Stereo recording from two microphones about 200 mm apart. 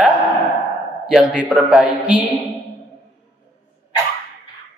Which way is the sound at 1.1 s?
5° right (ahead or behind).